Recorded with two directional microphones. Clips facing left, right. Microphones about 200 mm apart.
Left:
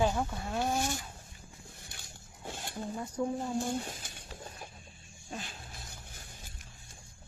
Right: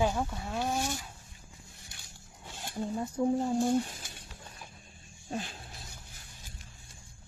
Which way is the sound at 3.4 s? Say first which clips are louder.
Right 6 dB; 50° right (ahead or behind).